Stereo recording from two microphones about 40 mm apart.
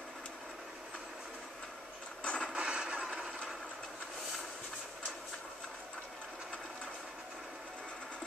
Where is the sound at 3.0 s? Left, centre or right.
Centre.